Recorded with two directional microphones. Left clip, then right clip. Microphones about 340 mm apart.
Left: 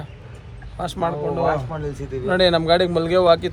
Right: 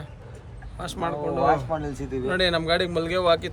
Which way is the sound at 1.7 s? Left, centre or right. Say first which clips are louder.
Even; right.